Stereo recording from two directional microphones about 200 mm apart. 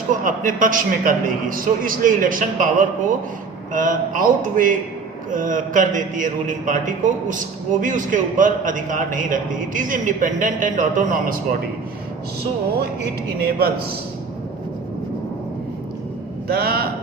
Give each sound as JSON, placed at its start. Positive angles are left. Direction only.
{"t": 0.1, "sound": "a man's voice", "side_deg": -40}
{"t": 3.7, "sound": "a man's voice", "side_deg": -40}
{"t": 13.4, "sound": "a man's voice", "side_deg": -50}
{"t": 16.5, "sound": "a man's voice", "side_deg": -50}